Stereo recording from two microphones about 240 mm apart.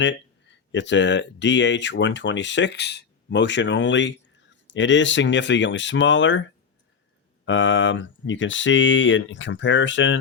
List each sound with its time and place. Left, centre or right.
0.0 s speech: left
7.4 s speech: left